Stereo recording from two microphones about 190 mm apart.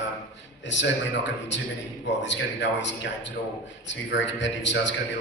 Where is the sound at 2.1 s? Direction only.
70° left (ahead or behind).